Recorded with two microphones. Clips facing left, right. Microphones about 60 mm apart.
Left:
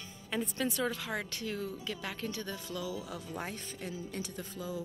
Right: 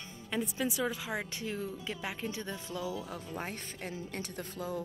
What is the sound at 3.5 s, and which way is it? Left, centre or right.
A woman's voice, right.